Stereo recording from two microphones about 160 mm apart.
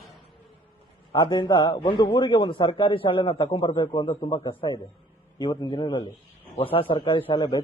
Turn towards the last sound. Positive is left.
turn(degrees=25)  # may be behind; listen again after turning